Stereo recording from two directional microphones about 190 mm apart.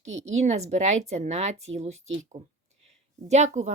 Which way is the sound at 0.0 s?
35° right (ahead or behind).